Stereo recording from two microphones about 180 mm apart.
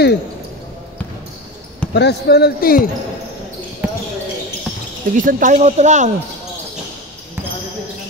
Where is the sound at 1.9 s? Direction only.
65° left (ahead or behind).